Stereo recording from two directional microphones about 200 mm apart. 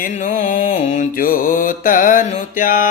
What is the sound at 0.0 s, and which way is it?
Mantra, 40° left (ahead or behind).